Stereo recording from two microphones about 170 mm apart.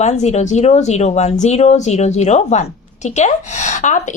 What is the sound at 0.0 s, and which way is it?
Speech, 40° left (ahead or behind).